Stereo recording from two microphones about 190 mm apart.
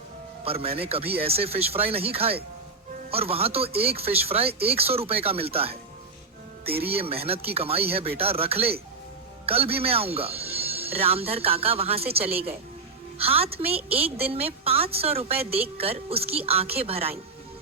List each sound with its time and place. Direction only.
0.4 s a woman's voice: 30° right (ahead or behind)
6.8 s a woman's voice: 30° right (ahead or behind)